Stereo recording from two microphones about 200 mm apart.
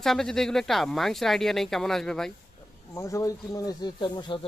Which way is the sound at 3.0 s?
15° left (ahead or behind).